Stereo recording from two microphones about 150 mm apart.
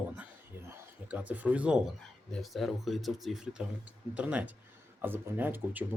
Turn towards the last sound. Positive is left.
turn(degrees=-10)  # may be behind; listen again after turning